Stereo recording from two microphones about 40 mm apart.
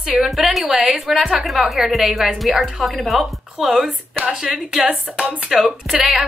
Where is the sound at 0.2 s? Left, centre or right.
Centre.